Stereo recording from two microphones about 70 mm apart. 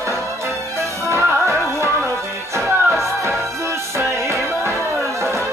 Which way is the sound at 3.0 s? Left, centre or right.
Right.